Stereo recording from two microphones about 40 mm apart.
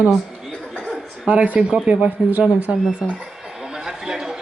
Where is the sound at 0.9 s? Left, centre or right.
Right.